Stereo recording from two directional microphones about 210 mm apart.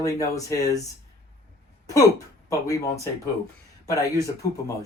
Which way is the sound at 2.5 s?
15° left (ahead or behind).